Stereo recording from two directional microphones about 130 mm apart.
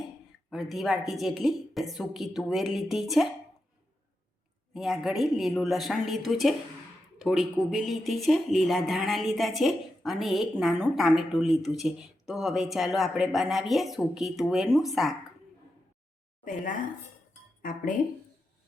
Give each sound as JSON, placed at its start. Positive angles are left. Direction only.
{"t": 0.5, "sound": "speech", "side_deg": 0}
{"t": 4.7, "sound": "speech", "side_deg": 0}
{"t": 16.4, "sound": "speech", "side_deg": 85}